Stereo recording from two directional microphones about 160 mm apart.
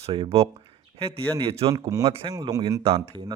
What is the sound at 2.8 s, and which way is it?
Speech, 30° right (ahead or behind).